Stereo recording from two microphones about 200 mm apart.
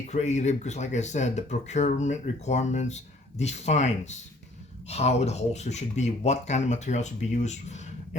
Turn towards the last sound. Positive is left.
turn(degrees=35)  # may be behind; listen again after turning